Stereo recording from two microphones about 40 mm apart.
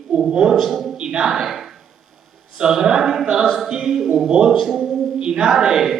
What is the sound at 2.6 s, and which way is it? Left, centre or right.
Speech, centre.